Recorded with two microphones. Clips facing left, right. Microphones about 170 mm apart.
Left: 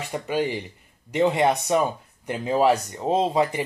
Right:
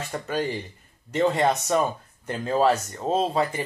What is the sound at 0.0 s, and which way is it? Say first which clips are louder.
Speech: left 2 dB; 10° left (ahead or behind).